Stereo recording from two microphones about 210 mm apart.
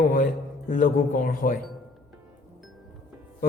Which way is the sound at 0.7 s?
40° left (ahead or behind).